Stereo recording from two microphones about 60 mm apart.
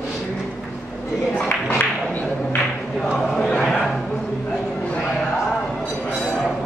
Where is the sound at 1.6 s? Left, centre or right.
Left.